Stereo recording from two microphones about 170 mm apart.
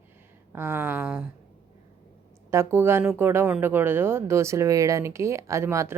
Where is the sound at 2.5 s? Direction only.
15° right (ahead or behind).